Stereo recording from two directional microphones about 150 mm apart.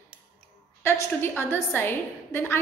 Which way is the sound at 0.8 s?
15° left (ahead or behind).